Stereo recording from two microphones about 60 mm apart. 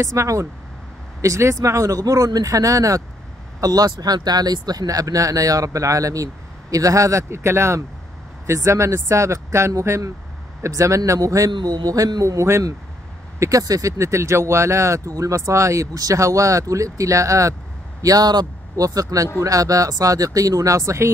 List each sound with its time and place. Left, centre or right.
0.0 s speech: right
3.6 s speech: right
13.4 s speech: right
18.0 s speech: right